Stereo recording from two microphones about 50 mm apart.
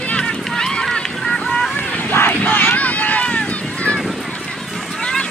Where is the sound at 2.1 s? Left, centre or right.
Left.